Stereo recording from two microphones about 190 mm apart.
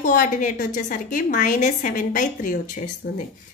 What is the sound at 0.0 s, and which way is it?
Speech, 45° left (ahead or behind).